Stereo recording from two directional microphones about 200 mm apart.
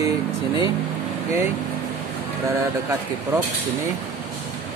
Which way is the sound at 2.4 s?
15° right (ahead or behind).